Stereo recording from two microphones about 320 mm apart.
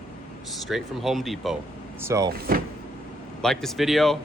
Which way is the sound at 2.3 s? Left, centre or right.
Right.